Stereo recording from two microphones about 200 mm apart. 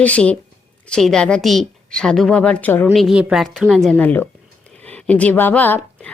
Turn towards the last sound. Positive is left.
turn(degrees=10)  # may be behind; listen again after turning